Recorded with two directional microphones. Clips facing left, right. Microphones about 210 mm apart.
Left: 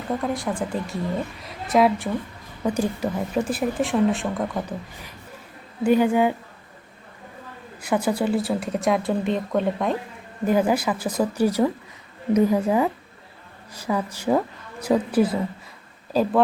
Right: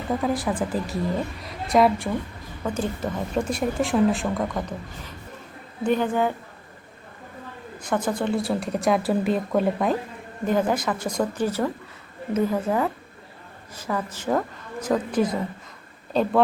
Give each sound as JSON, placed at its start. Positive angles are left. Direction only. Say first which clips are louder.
{"t": 0.1, "sound": "speech", "louder": "right 1 dB", "side_deg": 0}
{"t": 2.6, "sound": "speech", "louder": "left 3 dB", "side_deg": 10}
{"t": 7.8, "sound": "speech", "louder": "left 3 dB", "side_deg": 10}
{"t": 10.4, "sound": "speech", "louder": "left 2 dB", "side_deg": 10}